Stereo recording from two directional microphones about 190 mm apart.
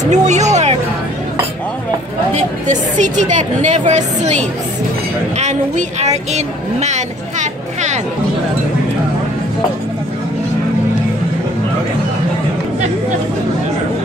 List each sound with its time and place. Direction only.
0.0 s music: 40° right (ahead or behind)
2.3 s a woman's voice: 40° right (ahead or behind)